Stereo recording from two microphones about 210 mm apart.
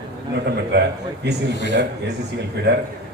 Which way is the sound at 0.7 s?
55° right (ahead or behind).